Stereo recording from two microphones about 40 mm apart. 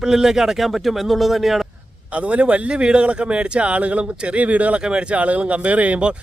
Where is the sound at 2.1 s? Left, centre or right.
Right.